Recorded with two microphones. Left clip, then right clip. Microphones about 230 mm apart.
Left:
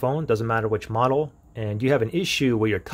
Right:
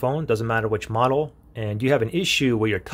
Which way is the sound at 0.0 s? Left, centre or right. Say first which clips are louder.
Even; centre.